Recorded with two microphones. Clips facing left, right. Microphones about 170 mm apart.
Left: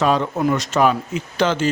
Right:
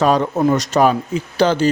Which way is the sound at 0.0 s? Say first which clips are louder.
Right 3 dB; 40° right (ahead or behind).